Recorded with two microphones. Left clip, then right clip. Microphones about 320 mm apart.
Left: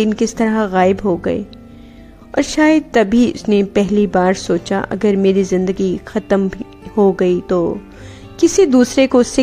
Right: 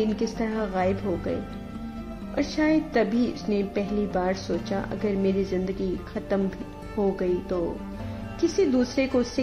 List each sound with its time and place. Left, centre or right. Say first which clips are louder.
0.4 s a woman's voice: left 14 dB; left
2.3 s a woman's voice: left 11 dB; left